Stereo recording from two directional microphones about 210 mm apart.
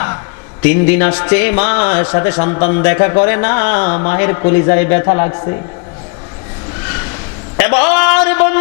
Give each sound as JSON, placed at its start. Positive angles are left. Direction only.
{"t": 0.6, "sound": "a man's voice", "side_deg": 60}
{"t": 0.9, "sound": "a man's voice", "side_deg": 15}
{"t": 7.5, "sound": "a sound", "side_deg": 15}